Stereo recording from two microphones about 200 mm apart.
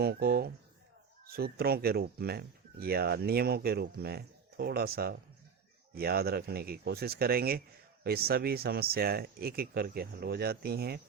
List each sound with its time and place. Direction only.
0.0 s speech: 50° right (ahead or behind)